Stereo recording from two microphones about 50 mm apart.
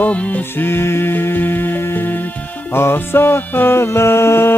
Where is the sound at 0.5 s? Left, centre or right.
Left.